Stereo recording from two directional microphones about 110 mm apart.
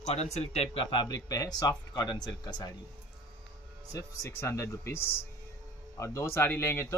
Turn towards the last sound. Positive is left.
turn(degrees=25)  # may be behind; listen again after turning